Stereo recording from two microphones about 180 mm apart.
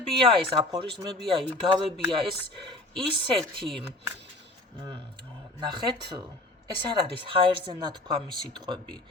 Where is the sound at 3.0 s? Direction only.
30° right (ahead or behind).